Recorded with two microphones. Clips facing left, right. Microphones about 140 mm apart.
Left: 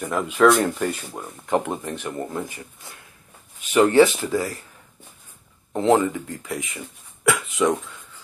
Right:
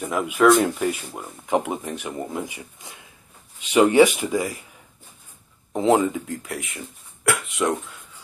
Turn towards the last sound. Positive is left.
turn(degrees=0)  # may be behind; listen again after turning